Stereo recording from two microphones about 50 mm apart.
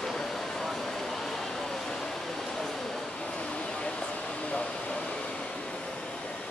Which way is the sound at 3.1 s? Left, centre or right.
Left.